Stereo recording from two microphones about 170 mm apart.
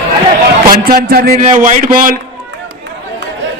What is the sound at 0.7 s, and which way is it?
Speech, 60° right (ahead or behind).